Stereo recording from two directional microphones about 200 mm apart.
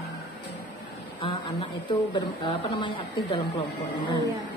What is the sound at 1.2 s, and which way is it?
Speech, 25° left (ahead or behind).